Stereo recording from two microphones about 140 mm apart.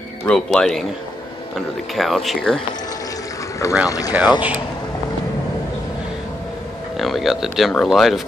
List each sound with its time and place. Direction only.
0.3 s speech: 5° left (ahead or behind)
2.0 s speech: centre (ahead or behind)
3.6 s speech: 20° left (ahead or behind)
4.1 s speech: 10° right (ahead or behind)
7.0 s speech: centre (ahead or behind)